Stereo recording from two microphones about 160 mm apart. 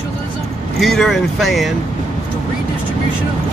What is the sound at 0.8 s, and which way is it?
Speech, centre (ahead or behind).